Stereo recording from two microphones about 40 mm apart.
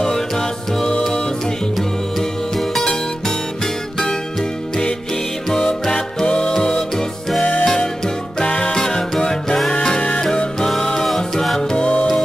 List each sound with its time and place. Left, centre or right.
0.0 s music: centre
2.8 s music: centre
5.5 s music: centre
11.1 s music: centre
11.7 s music: left